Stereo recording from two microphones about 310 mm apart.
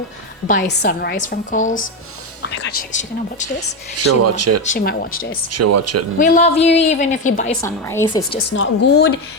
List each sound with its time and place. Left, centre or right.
0.4 s a woman's voice: left
3.9 s speech: right
4.6 s a woman's voice: left
5.5 s speech: right
6.1 s a woman's voice: left
7.6 s a woman's voice: centre
8.4 s a woman's voice: left